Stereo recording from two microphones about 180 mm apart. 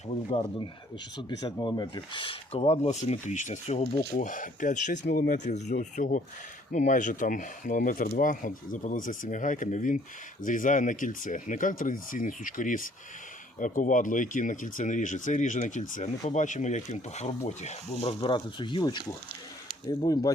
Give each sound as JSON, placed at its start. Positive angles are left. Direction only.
{"t": 0.3, "sound": "speech", "side_deg": 25}